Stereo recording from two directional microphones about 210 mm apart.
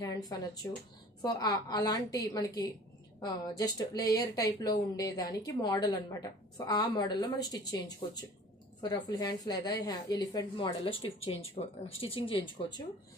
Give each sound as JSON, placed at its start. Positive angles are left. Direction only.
{"t": 0.0, "sound": "a woman's voice", "side_deg": 15}